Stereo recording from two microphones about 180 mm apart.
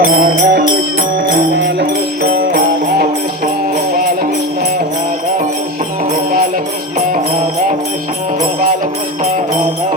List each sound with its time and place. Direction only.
0.0 s music: 55° right (ahead or behind)
1.3 s music: 65° right (ahead or behind)